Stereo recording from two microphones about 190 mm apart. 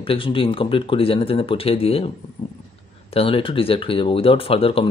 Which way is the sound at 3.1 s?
30° left (ahead or behind).